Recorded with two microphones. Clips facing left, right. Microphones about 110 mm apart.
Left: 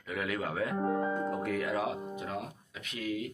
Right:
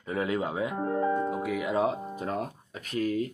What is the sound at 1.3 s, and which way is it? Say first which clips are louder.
Speech: right 2 dB; 5° right (ahead or behind).